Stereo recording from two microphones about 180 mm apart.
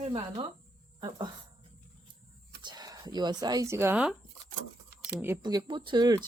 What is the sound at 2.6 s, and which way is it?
Speech, 20° right (ahead or behind).